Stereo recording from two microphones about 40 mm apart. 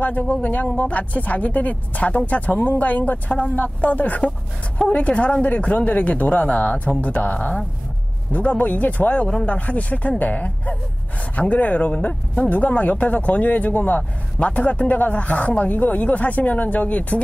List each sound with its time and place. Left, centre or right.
0.3 s speech: left
3.3 s speech: left
14.4 s speech: left